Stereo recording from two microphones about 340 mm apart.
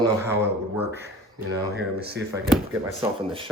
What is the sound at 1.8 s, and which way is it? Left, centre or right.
Speech, right.